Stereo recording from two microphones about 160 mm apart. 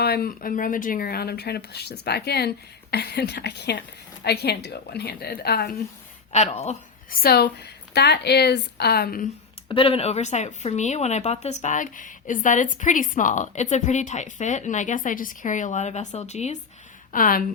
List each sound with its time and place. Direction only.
0.0 s a woman's voice: 75° left (ahead or behind)
6.3 s speech: 45° left (ahead or behind)
7.1 s a woman's voice: 70° left (ahead or behind)
9.6 s speech: 35° left (ahead or behind)
17.1 s speech: 60° left (ahead or behind)